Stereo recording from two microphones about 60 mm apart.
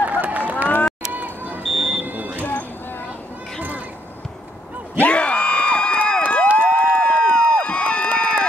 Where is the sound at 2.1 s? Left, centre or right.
Right.